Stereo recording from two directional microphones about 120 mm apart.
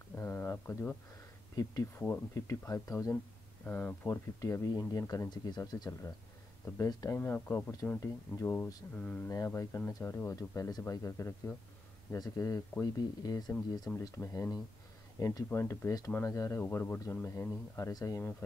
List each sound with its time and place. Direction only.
0.1 s a sound: 20° left (ahead or behind)
1.6 s speech: 25° left (ahead or behind)
3.6 s speech: 15° left (ahead or behind); by 7.2 s 30° left (ahead or behind)
7.2 s speech: 15° left (ahead or behind)
9.3 s speech: 25° left (ahead or behind)